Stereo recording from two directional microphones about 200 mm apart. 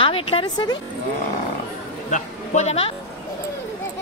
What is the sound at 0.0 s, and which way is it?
Speech, 25° left (ahead or behind).